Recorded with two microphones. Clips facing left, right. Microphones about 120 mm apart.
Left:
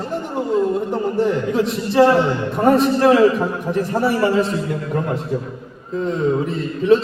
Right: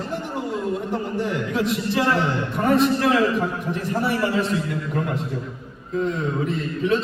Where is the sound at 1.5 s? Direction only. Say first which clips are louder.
Left 3 dB; 30° left (ahead or behind).